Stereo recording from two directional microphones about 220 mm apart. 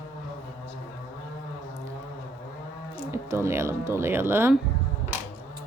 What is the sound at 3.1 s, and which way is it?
Speech, 10° right (ahead or behind).